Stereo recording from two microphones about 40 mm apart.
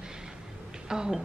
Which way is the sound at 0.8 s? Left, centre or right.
Centre.